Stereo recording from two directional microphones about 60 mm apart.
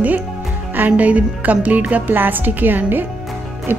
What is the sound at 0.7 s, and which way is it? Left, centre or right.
A woman's voice, right.